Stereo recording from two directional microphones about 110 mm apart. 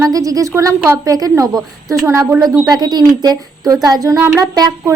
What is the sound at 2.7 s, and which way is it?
A woman's voice, 40° right (ahead or behind).